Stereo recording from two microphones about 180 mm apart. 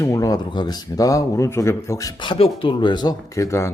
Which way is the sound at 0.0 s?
20° left (ahead or behind).